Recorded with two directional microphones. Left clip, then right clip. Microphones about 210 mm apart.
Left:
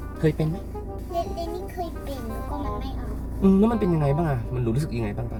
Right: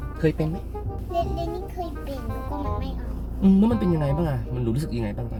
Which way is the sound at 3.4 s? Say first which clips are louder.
Left 1 dB; 15° right (ahead or behind).